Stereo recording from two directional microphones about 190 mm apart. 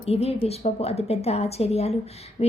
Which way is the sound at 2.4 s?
35° left (ahead or behind).